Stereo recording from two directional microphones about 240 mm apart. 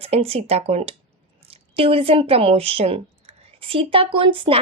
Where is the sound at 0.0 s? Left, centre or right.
Right.